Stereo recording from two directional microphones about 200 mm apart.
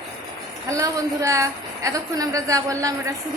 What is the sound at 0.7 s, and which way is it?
A woman's voice, 15° right (ahead or behind).